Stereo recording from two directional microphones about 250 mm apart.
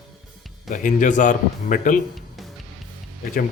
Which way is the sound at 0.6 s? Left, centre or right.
Left.